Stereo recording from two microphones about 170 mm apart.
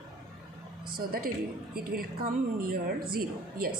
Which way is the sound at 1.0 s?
60° right (ahead or behind).